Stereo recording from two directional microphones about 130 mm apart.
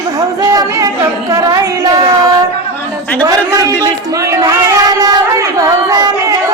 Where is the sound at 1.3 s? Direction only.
30° right (ahead or behind).